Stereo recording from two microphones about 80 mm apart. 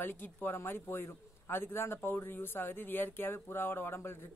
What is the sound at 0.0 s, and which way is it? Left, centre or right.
A man's voice, left.